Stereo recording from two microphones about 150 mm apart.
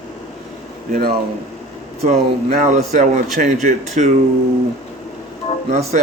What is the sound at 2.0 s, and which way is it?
Speech, 45° right (ahead or behind).